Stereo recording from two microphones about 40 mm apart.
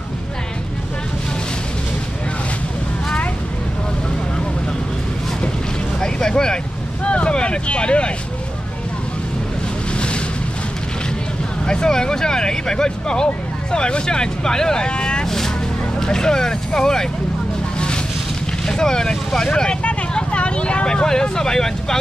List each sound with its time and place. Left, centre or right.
5.9 s boat: centre
7.1 s vehicle: left
9.9 s boat: left
11.6 s speech: centre
15.2 s vehicle: centre
16.0 s speech: centre
17.7 s vehicle: left
18.7 s speech: centre
19.8 s vehicle: left; by 21.9 s centre